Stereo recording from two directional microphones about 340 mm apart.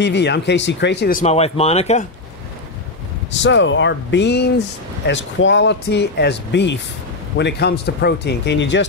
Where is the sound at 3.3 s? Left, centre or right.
Left.